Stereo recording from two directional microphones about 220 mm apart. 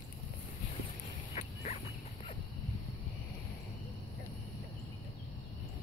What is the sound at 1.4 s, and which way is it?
Dog, 35° left (ahead or behind).